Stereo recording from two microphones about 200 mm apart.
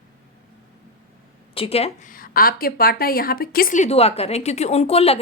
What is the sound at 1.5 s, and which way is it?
A woman's voice, 30° left (ahead or behind).